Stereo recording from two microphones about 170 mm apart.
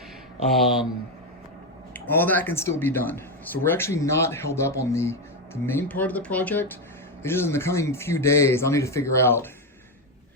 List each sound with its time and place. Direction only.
0.5 s speech: centre (ahead or behind)
1.9 s speech: 10° left (ahead or behind)